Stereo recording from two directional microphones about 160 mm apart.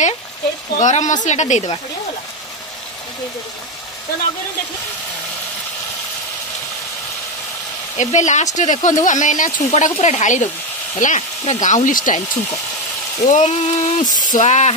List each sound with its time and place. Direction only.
0.7 s speech: 50° left (ahead or behind)
8.0 s speech: 50° left (ahead or behind)